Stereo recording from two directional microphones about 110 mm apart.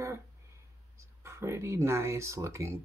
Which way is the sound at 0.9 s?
25° right (ahead or behind).